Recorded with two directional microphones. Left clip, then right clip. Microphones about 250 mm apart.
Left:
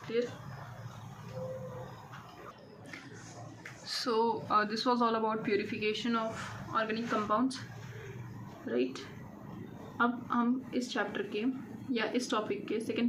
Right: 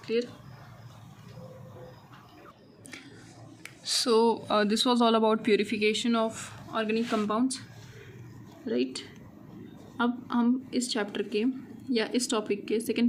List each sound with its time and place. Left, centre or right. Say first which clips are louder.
3.8 s a man's voice: right 7 dB; right
8.6 s a woman's voice: right 3 dB; right
10.0 s a woman's voice: right 2 dB; right